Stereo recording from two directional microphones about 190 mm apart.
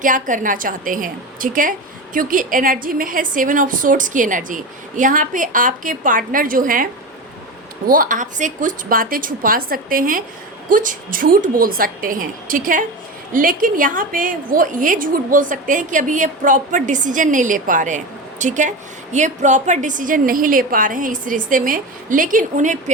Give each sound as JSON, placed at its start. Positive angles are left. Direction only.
{"t": 0.0, "sound": "a woman's voice", "side_deg": -45}
{"t": 7.9, "sound": "a woman's voice", "side_deg": -45}